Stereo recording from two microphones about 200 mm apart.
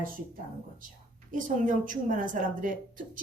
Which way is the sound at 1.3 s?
40° right (ahead or behind).